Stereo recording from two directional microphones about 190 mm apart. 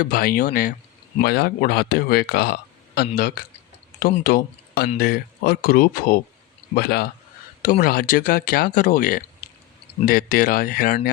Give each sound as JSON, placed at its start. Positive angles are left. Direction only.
{"t": 0.0, "sound": "speech", "side_deg": 50}
{"t": 4.2, "sound": "speech", "side_deg": 55}